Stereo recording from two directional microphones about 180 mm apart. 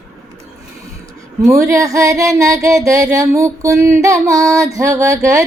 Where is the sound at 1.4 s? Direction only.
15° right (ahead or behind).